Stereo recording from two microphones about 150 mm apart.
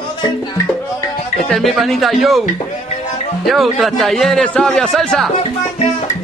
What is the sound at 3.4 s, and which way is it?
Speech, centre (ahead or behind).